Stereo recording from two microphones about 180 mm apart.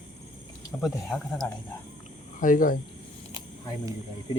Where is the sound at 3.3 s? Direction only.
25° left (ahead or behind).